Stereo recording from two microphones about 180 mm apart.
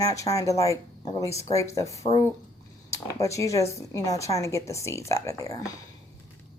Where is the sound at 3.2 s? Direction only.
15° left (ahead or behind).